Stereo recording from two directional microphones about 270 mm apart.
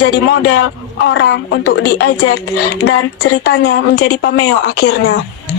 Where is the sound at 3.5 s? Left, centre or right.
Left.